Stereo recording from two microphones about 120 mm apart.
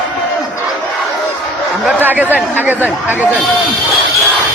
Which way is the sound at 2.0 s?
15° right (ahead or behind).